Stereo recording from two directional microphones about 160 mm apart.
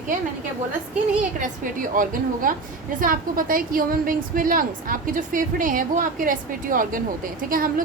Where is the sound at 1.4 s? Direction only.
55° right (ahead or behind).